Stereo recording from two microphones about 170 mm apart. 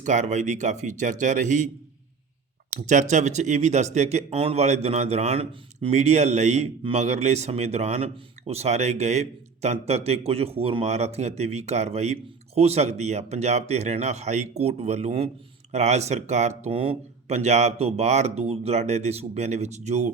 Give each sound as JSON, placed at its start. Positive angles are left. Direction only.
{"t": 0.0, "sound": "speech", "side_deg": -45}
{"t": 2.7, "sound": "speech", "side_deg": -45}